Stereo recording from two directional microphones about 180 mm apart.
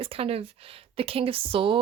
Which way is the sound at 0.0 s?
30° right (ahead or behind).